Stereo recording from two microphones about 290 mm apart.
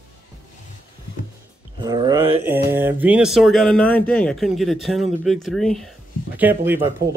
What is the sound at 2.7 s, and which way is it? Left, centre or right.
Speech, centre.